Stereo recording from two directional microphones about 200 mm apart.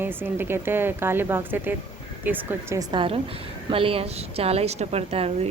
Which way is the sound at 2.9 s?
25° right (ahead or behind).